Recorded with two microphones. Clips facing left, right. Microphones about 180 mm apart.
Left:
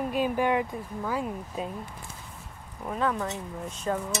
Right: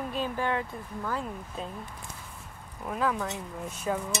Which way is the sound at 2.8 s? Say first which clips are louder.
Left 1 dB; centre (ahead or behind).